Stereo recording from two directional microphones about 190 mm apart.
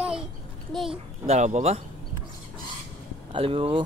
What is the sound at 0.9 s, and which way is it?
Speech, 30° right (ahead or behind).